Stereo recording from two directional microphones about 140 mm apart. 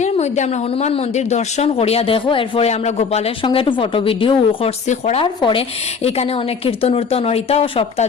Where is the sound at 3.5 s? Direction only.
35° left (ahead or behind).